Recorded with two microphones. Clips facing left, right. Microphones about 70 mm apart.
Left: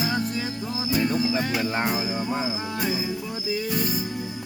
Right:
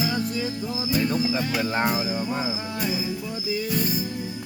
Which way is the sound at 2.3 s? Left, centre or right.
Centre.